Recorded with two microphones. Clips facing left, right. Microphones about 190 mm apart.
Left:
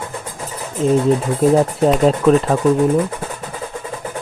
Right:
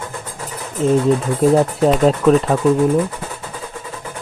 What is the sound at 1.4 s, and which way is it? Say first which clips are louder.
Speech: even; centre (ahead or behind).